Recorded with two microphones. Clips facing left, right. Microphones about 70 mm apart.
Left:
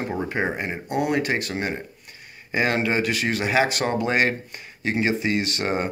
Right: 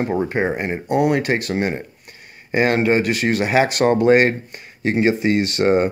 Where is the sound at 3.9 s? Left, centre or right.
Right.